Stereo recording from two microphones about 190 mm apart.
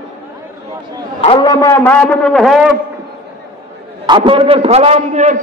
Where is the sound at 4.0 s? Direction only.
25° right (ahead or behind).